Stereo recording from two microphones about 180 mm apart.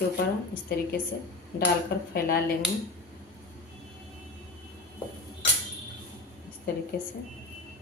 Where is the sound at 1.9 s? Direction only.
65° left (ahead or behind).